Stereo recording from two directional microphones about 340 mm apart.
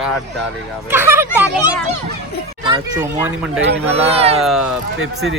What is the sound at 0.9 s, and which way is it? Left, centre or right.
Speech, centre.